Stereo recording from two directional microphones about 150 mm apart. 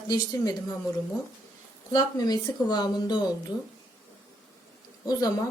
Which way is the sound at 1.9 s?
25° left (ahead or behind).